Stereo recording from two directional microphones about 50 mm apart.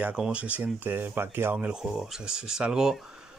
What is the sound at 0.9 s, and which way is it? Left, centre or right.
Speech, right.